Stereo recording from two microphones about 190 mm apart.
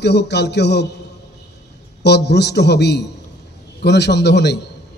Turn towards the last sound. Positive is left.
turn(degrees=60)  # may be behind; listen again after turning